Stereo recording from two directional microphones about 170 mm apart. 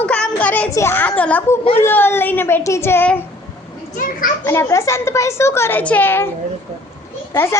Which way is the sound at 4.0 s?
55° left (ahead or behind).